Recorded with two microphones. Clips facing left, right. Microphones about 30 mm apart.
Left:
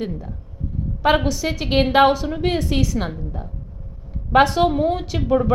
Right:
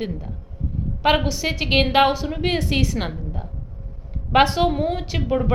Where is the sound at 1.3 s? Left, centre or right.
Right.